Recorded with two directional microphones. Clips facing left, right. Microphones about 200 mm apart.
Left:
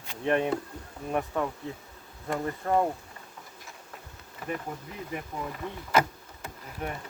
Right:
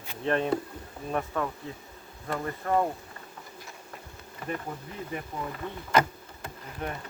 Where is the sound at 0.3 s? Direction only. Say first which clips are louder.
Even; 15° left (ahead or behind).